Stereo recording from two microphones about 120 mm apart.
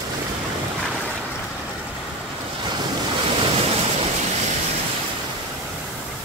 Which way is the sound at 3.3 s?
55° right (ahead or behind).